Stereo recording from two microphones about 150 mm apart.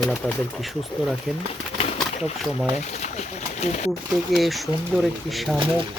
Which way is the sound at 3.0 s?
50° left (ahead or behind).